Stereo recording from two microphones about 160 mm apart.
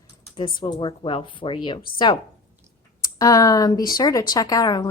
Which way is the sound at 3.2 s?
20° left (ahead or behind).